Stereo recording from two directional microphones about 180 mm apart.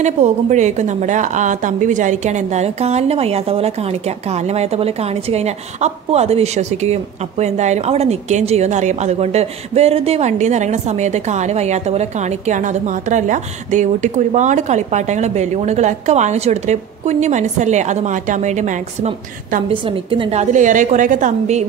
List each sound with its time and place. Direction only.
0.0 s a woman's voice: 40° right (ahead or behind)
19.7 s a woman's voice: 30° right (ahead or behind)